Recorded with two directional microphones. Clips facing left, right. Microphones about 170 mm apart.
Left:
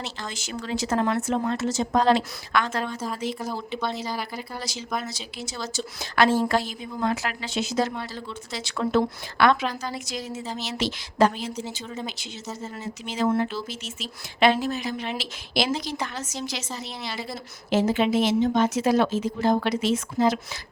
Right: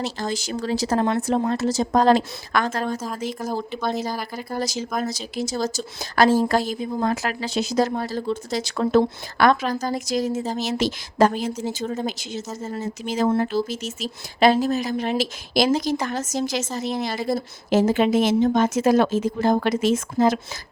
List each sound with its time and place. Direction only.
0.0 s speech: 35° right (ahead or behind)